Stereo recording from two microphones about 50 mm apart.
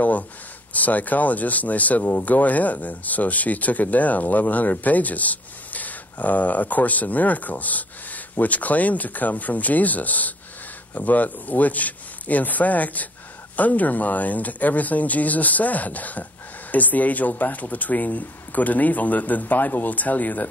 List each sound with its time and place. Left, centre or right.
0.7 s speech: left